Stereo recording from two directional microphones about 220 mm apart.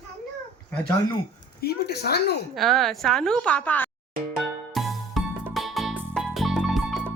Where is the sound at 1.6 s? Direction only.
45° left (ahead or behind).